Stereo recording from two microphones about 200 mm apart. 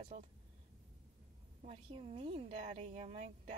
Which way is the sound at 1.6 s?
30° right (ahead or behind).